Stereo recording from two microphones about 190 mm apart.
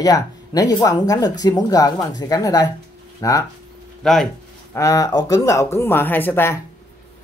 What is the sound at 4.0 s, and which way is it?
Speech, centre (ahead or behind).